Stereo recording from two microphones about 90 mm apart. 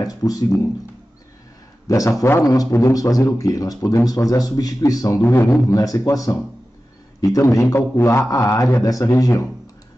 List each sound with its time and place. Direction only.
0.0 s speech: 40° left (ahead or behind)
1.9 s a man's voice: 40° left (ahead or behind)
5.2 s a man's voice: 25° left (ahead or behind)
5.8 s a man's voice: 40° left (ahead or behind)
7.3 s a man's voice: 40° left (ahead or behind)